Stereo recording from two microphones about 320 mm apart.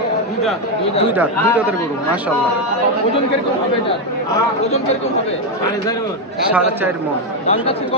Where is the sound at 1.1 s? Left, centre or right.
Centre.